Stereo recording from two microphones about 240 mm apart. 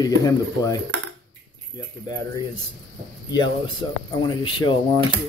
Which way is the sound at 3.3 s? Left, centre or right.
Centre.